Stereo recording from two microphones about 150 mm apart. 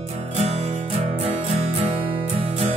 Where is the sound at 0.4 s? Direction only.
45° right (ahead or behind).